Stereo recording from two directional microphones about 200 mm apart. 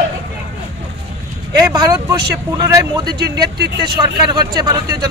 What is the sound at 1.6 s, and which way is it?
A man's voice, 20° right (ahead or behind).